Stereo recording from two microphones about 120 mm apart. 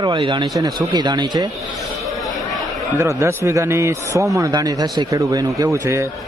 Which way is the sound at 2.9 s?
25° right (ahead or behind).